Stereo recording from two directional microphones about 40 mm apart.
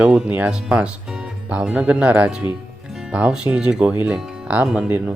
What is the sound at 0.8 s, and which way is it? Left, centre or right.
Music, right.